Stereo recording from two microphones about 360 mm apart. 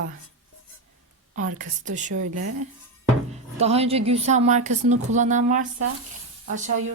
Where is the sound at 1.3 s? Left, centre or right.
Right.